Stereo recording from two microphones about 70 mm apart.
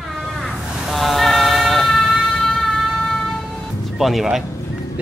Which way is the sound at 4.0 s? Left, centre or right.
Centre.